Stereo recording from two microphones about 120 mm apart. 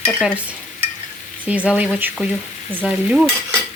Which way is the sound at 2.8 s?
5° right (ahead or behind).